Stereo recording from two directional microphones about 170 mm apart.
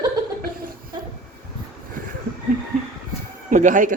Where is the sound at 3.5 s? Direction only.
50° right (ahead or behind).